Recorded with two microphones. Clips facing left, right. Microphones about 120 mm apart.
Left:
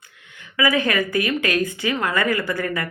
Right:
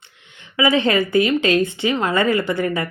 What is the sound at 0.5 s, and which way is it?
A woman's voice, 25° right (ahead or behind).